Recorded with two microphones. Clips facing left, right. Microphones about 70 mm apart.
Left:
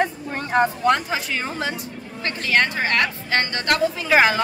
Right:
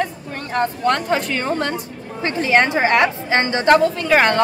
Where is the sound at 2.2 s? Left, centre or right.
Right.